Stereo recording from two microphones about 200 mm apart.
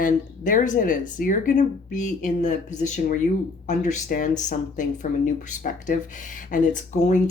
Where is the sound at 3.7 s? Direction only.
40° left (ahead or behind).